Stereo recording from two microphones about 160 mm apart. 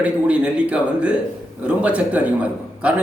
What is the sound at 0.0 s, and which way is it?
A man's voice, 10° right (ahead or behind).